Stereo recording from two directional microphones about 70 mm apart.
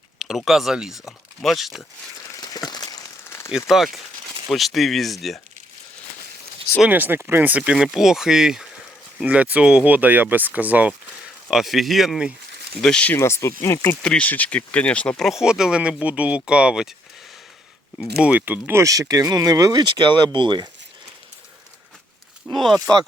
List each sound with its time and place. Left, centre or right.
0.2 s speech: centre
2.4 s a sound: left
3.2 s a sound: left
3.7 s speech: centre
6.8 s speech: right; by 8.6 s centre
9.2 s speech: right
11.5 s speech: centre
13.1 s speech: left
14.0 s speech: centre
15.2 s speech: centre
18.0 s speech: centre
18.8 s speech: right
22.5 s speech: centre